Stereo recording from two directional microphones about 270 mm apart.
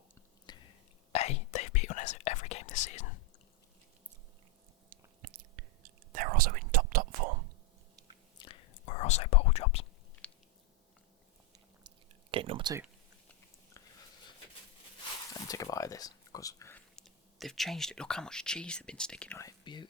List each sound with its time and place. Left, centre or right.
0.5 s whispering: centre
5.2 s whispering: right
8.4 s whispering: left
11.9 s chewing: centre
12.3 s a sound: centre
15.3 s speech: centre